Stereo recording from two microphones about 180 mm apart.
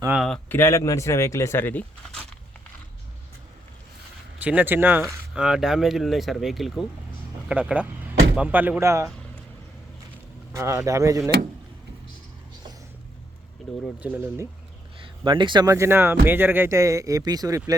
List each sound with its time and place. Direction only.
0.2 s speech: 5° left (ahead or behind)
4.4 s speech: 10° right (ahead or behind)
10.5 s speech: 15° right (ahead or behind)
14.0 s speech: 10° right (ahead or behind)
15.0 s speech: 25° right (ahead or behind)